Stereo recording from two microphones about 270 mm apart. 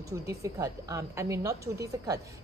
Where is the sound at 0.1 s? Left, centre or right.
Centre.